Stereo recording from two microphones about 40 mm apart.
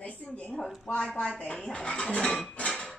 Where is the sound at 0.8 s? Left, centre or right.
Left.